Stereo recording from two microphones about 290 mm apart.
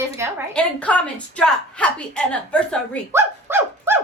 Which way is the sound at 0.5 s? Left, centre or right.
Centre.